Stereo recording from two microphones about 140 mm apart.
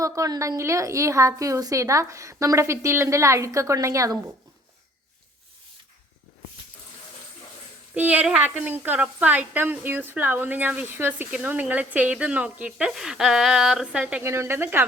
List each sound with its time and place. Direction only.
0.0 s a woman's voice: 25° right (ahead or behind)
7.9 s speech: 10° right (ahead or behind)